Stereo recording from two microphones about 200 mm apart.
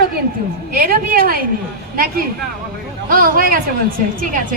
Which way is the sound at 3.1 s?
45° right (ahead or behind).